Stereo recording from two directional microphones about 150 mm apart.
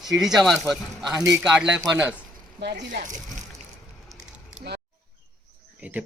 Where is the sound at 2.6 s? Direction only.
90° right.